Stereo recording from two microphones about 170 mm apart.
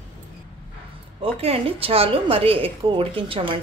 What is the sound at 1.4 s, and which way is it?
A woman's voice, 35° right (ahead or behind).